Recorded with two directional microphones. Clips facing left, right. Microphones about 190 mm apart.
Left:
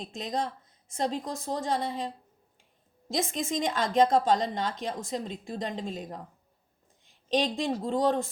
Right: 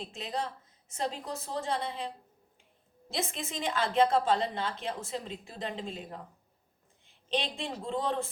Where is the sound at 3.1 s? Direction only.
40° left (ahead or behind).